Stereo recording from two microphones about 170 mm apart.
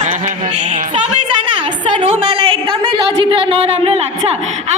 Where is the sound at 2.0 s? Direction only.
35° right (ahead or behind).